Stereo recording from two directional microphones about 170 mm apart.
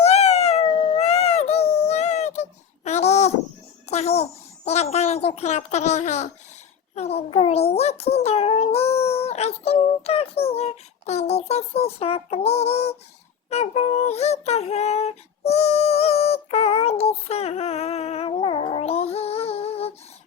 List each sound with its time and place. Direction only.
0.0 s a sound: 40° left (ahead or behind)
3.8 s child singing: 40° left (ahead or behind)
13.5 s music: 35° left (ahead or behind)